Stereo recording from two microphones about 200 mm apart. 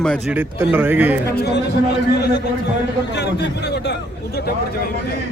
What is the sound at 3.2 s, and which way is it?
Speech, 55° left (ahead or behind).